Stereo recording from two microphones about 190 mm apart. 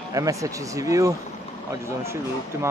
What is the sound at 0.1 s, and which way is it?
Speech, 15° right (ahead or behind).